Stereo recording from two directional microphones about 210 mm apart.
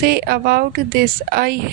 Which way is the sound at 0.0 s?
50° right (ahead or behind).